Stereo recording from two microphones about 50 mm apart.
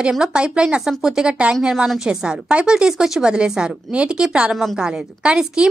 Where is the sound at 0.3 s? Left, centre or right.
Centre.